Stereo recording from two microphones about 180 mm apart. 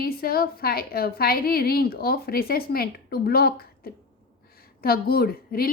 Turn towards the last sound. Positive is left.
turn(degrees=55)  # may be behind; listen again after turning